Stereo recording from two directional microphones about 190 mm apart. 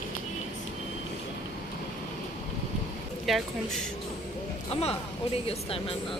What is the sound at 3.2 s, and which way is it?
Speech, centre (ahead or behind).